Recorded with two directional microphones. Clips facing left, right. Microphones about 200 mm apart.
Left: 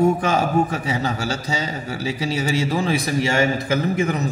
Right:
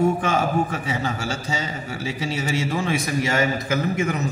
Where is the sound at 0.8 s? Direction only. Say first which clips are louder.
Left 2 dB; 35° left (ahead or behind).